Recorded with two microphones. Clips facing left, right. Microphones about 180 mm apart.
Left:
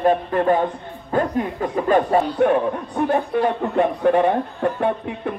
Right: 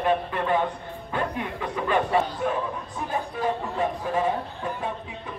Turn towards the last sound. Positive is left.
turn(degrees=65)  # may be behind; listen again after turning